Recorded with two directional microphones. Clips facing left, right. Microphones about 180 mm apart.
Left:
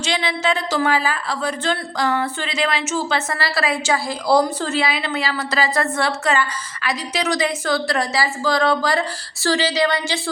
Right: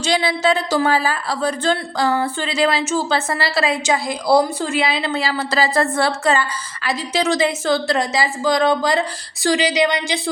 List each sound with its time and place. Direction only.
0.0 s a woman's voice: 35° right (ahead or behind); by 4.9 s 15° right (ahead or behind)
4.9 s a woman's voice: 30° right (ahead or behind)